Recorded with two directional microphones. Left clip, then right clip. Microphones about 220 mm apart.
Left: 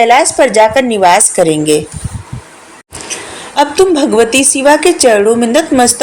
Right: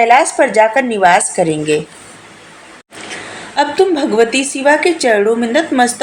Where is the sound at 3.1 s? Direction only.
30° left (ahead or behind).